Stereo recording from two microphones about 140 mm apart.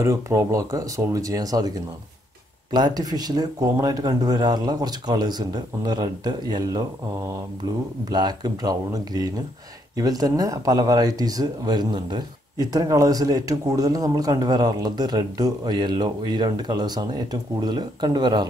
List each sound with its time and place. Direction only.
0.0 s speech: 20° right (ahead or behind)
2.7 s speech: 30° right (ahead or behind)